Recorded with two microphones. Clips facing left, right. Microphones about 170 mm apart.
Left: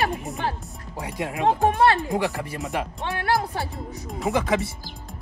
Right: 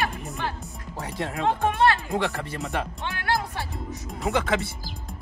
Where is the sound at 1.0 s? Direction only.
15° left (ahead or behind).